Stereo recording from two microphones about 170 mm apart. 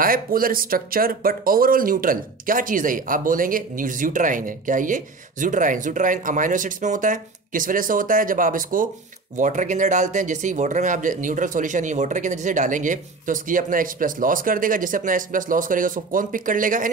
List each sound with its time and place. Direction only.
0.0 s speech: 55° right (ahead or behind)